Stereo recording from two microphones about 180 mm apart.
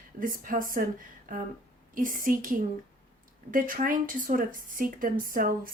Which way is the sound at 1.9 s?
50° right (ahead or behind).